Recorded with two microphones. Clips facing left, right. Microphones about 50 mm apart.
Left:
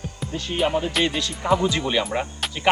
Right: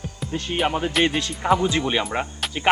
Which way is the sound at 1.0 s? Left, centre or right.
Right.